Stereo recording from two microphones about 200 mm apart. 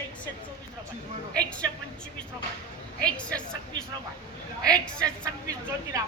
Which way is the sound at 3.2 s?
5° left (ahead or behind).